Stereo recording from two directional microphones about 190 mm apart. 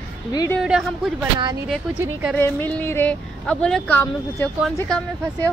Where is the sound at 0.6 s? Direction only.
5° right (ahead or behind).